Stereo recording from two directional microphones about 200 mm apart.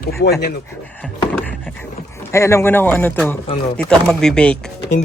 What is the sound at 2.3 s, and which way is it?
Speech, 15° left (ahead or behind).